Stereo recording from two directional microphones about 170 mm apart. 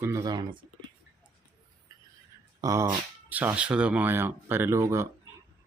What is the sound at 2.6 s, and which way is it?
Speech, 20° right (ahead or behind).